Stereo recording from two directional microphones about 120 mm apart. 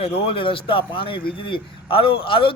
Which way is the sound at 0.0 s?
50° left (ahead or behind).